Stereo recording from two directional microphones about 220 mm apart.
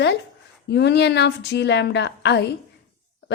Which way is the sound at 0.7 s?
50° left (ahead or behind).